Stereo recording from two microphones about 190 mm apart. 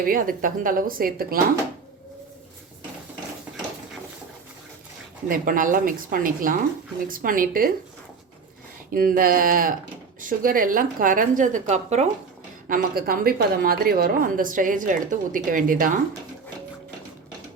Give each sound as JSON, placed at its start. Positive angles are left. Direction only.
{"t": 0.0, "sound": "a woman's voice", "side_deg": -50}
{"t": 5.3, "sound": "a woman's voice", "side_deg": -45}
{"t": 8.9, "sound": "a woman's voice", "side_deg": -50}
{"t": 12.6, "sound": "a woman's voice", "side_deg": -50}